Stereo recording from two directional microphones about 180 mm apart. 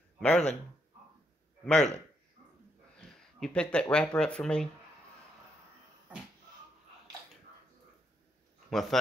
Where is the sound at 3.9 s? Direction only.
5° left (ahead or behind).